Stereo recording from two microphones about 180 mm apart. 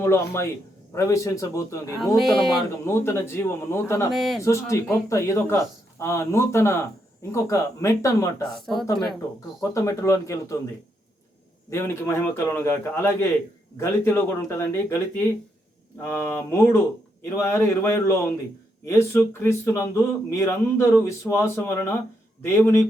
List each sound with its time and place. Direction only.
0.0 s a man's voice: 15° left (ahead or behind)
2.1 s speech: centre (ahead or behind)
2.6 s a man's voice: 15° left (ahead or behind)
4.1 s speech: centre (ahead or behind)
4.4 s a man's voice: 15° left (ahead or behind)
8.5 s speech: centre (ahead or behind)
9.6 s a man's voice: 15° left (ahead or behind)
11.7 s a man's voice: 15° left (ahead or behind)